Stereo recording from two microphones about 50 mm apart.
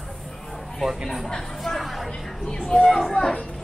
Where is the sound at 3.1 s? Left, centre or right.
Centre.